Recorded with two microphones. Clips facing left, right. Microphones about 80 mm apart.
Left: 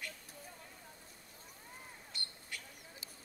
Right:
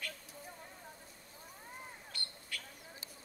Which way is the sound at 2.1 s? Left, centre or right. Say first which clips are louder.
Even; centre.